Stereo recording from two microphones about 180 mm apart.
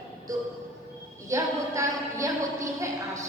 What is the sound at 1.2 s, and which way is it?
A woman's voice, 15° right (ahead or behind).